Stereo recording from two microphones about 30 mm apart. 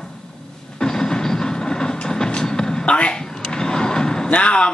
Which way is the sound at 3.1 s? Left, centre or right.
Left.